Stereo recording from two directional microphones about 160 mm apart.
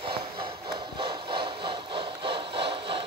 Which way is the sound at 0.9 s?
30° right (ahead or behind).